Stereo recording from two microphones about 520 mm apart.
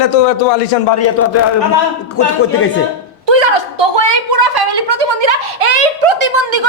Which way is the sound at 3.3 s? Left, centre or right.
Right.